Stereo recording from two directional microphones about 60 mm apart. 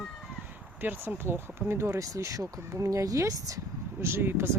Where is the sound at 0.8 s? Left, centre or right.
Right.